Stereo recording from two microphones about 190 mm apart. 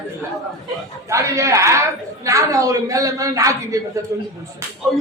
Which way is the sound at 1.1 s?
15° right (ahead or behind).